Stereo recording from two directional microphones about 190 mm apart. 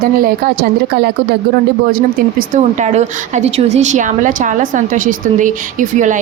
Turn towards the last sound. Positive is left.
turn(degrees=-40)  # may be behind; listen again after turning